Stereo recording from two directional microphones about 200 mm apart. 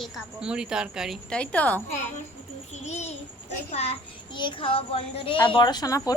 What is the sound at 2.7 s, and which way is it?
Babbling, 35° left (ahead or behind).